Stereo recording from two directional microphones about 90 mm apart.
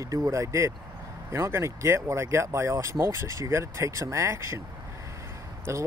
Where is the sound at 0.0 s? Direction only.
35° right (ahead or behind).